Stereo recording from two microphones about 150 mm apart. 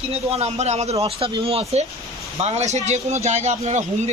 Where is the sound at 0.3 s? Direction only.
45° right (ahead or behind).